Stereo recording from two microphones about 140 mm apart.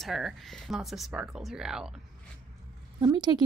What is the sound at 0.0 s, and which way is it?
Speech, centre (ahead or behind).